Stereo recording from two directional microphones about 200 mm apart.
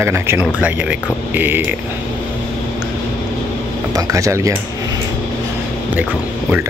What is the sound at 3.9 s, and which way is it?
Speech, 15° right (ahead or behind).